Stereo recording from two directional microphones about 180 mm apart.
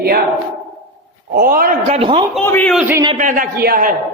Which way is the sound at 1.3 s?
55° right (ahead or behind).